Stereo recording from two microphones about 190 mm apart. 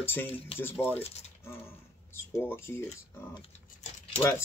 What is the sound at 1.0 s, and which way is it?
Speech, 35° left (ahead or behind).